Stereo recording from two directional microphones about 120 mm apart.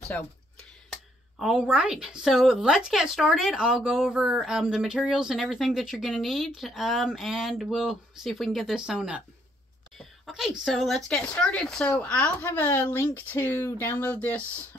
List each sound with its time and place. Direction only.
1.4 s a woman's voice: 10° right (ahead or behind); by 14.4 s 15° left (ahead or behind)